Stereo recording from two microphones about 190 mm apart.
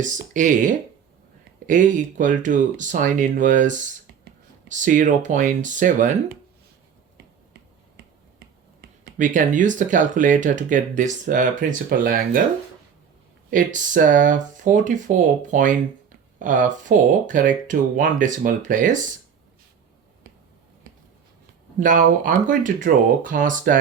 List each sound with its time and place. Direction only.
0.0 s speech: 40° right (ahead or behind)
9.1 s speech: 45° right (ahead or behind)
13.5 s speech: 45° right (ahead or behind)
21.8 s speech: 45° right (ahead or behind)